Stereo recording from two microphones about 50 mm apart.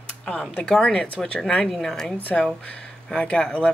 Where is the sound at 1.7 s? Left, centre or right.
Centre.